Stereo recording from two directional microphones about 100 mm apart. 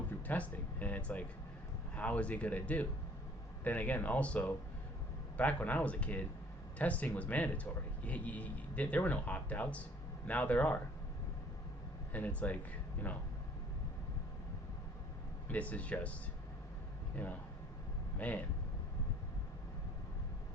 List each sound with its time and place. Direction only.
0.3 s a man's voice: 15° left (ahead or behind)
12.1 s a man's voice: 15° left (ahead or behind)
15.4 s a man's voice: 15° left (ahead or behind)
18.2 s a man's voice: 15° left (ahead or behind)